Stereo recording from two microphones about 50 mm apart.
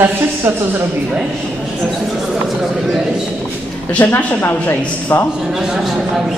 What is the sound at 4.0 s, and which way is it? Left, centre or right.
A woman's voice, left.